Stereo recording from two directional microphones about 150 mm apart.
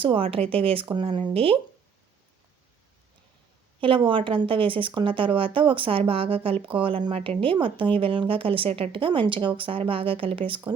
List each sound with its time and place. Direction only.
0.0 s speech: 35° right (ahead or behind)
3.8 s speech: 35° right (ahead or behind)